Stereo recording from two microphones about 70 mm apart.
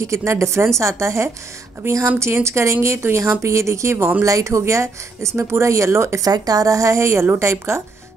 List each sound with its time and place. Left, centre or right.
0.0 s speech: right
6.2 s speech: right